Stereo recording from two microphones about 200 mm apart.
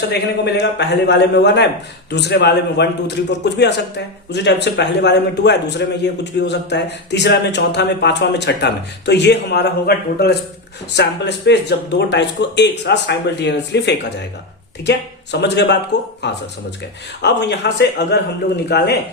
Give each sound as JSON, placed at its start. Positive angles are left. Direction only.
{"t": 0.1, "sound": "a man's voice", "side_deg": 55}